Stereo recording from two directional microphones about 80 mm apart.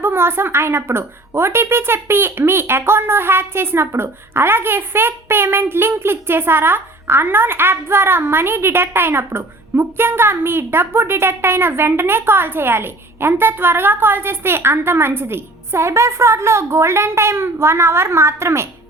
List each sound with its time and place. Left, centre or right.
0.0 s a woman's voice: right